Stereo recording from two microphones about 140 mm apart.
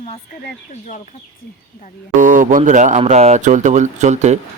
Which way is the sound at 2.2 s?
65° right (ahead or behind).